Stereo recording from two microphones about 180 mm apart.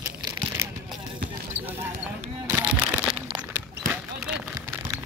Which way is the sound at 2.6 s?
10° right (ahead or behind).